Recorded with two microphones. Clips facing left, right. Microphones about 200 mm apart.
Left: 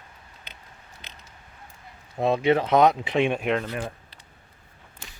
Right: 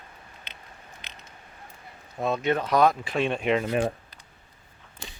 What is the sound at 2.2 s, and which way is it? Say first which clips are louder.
Speech: left 4 dB; 30° left (ahead or behind).